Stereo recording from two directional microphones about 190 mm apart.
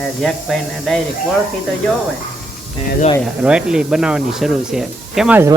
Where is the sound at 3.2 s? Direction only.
5° right (ahead or behind).